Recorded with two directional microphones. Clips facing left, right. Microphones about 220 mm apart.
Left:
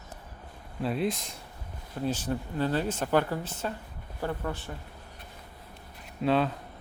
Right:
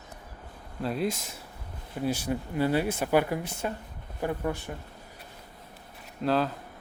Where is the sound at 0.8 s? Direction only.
Centre (ahead or behind).